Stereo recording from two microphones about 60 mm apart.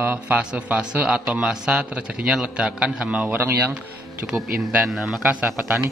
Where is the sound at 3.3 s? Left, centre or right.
Right.